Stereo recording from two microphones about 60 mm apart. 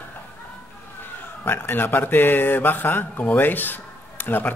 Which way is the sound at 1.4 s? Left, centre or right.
Left.